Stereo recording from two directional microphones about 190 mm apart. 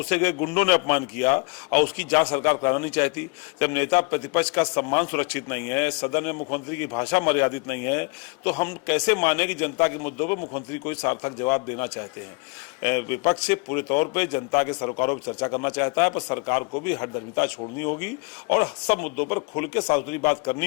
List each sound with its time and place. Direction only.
0.0 s a man's voice: 10° left (ahead or behind)